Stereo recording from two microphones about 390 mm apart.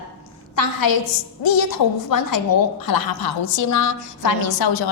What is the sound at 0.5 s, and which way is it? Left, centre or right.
Speech, left.